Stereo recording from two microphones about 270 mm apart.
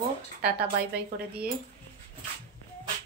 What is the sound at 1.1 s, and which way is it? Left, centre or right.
Speech, right.